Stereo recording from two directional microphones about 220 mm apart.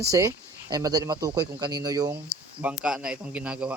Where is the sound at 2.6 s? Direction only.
5° right (ahead or behind).